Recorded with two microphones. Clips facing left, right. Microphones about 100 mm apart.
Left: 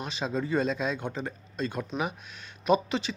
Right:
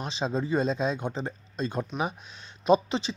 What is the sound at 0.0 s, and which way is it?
Speech, 30° right (ahead or behind).